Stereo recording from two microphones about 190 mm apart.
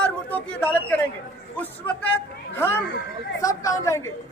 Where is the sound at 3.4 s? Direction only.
15° left (ahead or behind).